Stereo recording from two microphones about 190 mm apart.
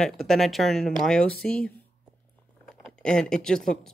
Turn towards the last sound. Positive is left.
turn(degrees=5)  # may be behind; listen again after turning